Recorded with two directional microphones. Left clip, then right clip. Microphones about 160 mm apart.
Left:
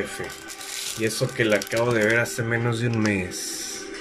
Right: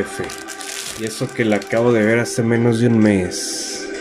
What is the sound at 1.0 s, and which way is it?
Speech, 30° right (ahead or behind).